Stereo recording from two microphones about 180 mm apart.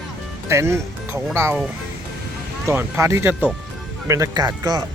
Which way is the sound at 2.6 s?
15° right (ahead or behind).